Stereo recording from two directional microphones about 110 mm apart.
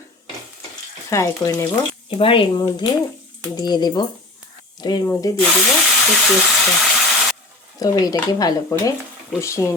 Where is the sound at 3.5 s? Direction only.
40° left (ahead or behind).